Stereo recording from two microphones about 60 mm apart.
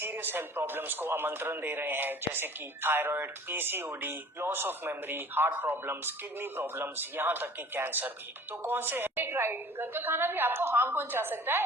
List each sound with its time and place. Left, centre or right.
0.0 s speech: right